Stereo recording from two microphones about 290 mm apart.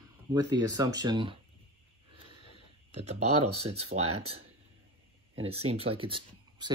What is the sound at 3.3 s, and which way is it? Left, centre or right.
Speech, right.